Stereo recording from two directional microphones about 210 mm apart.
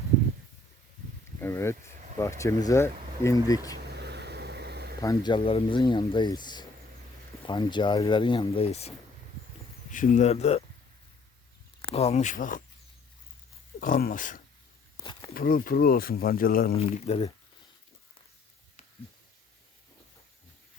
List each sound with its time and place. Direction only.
1.4 s a sound: 10° left (ahead or behind)
2.4 s speech: 15° left (ahead or behind)
3.8 s vehicle: 50° right (ahead or behind)
5.0 s speech: 20° left (ahead or behind)
9.9 s speech: 35° left (ahead or behind)
11.8 s speech: 30° left (ahead or behind)
13.7 s speech: 40° left (ahead or behind)
14.9 s a sound: 20° left (ahead or behind)
15.4 s speech: 45° left (ahead or behind)
16.7 s speech: 30° left (ahead or behind)